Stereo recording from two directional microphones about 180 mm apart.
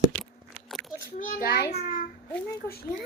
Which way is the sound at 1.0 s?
50° left (ahead or behind).